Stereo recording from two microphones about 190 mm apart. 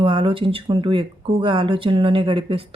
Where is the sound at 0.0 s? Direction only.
25° right (ahead or behind).